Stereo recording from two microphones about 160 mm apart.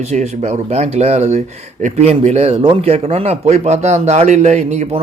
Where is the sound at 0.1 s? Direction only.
45° right (ahead or behind).